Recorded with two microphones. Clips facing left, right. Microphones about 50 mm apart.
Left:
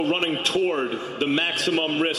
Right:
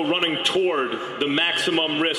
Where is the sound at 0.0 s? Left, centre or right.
Right.